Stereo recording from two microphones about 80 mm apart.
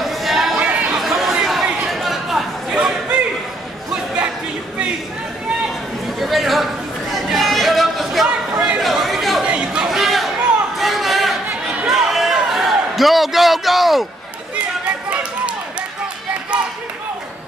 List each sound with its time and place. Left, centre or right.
0.0 s chatter: centre
0.6 s chatter: centre
6.1 s chatter: centre
8.5 s chatter: centre
8.8 s chatter: centre
9.4 s chatter: centre
9.8 s a sound: centre
11.4 s chatter: centre
11.9 s a sound: centre
16.5 s a sound: centre